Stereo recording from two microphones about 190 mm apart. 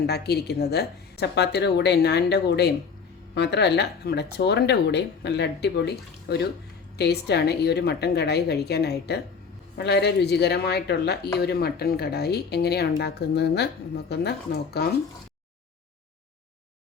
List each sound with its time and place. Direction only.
0.0 s speech: 60° left (ahead or behind)